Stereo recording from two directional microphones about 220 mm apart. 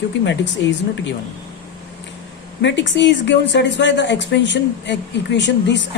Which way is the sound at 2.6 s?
55° left (ahead or behind).